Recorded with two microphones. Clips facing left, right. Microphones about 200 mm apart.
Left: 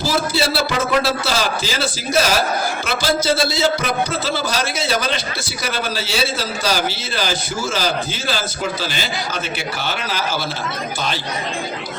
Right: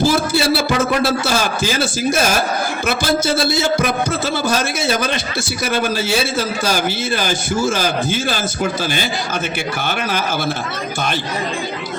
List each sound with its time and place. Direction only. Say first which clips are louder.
0.0 s music: right 4 dB; 55° right (ahead or behind)
1.2 s speech: right 2 dB; 50° right (ahead or behind)